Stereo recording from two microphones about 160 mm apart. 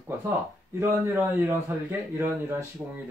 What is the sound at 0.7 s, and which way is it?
A man's voice, 15° right (ahead or behind).